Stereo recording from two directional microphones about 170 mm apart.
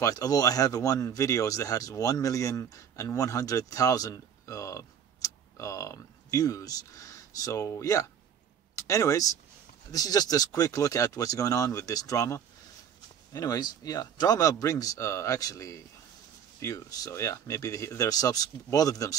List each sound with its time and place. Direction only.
0.0 s speech: 20° left (ahead or behind)